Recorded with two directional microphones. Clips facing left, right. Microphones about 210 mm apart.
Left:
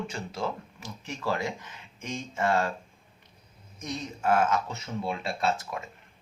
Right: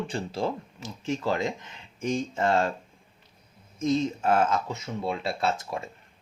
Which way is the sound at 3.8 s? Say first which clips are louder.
Right 8 dB; 25° right (ahead or behind).